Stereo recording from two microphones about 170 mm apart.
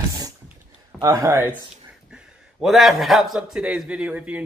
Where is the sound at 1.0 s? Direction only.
20° right (ahead or behind).